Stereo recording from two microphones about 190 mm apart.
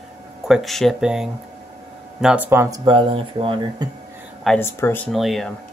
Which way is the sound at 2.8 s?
25° right (ahead or behind).